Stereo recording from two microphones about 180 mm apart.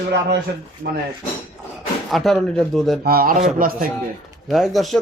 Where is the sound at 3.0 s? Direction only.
55° right (ahead or behind).